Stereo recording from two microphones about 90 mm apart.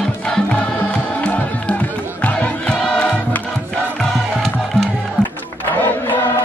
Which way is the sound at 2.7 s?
10° left (ahead or behind).